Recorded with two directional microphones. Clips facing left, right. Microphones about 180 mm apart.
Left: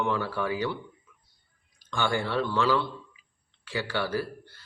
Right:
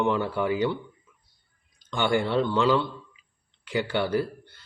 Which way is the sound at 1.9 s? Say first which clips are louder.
Right 4 dB; 20° right (ahead or behind).